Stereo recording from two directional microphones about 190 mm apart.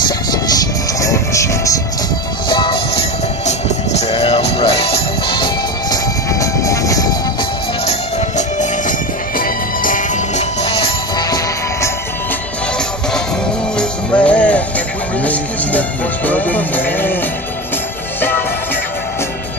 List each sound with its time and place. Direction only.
0.3 s music: 20° left (ahead or behind)
6.4 s train: 15° left (ahead or behind)
8.4 s music: 40° left (ahead or behind)
11.2 s music: 20° left (ahead or behind)
13.7 s music: 5° left (ahead or behind)
16.3 s music: 10° left (ahead or behind)